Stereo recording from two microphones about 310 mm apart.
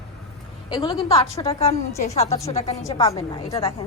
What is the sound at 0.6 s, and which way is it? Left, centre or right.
A woman's voice, centre.